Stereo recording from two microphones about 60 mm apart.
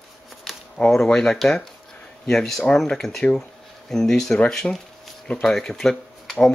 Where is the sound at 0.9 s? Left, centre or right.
Centre.